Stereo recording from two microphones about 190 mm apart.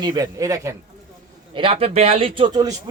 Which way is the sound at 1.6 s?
30° right (ahead or behind).